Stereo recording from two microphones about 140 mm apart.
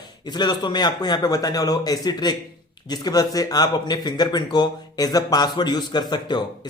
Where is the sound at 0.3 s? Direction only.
30° left (ahead or behind).